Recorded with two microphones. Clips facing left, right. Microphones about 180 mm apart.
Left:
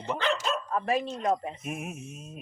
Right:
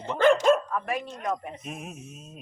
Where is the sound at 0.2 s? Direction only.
50° right (ahead or behind).